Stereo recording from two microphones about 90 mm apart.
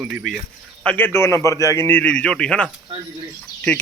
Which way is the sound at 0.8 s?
15° left (ahead or behind).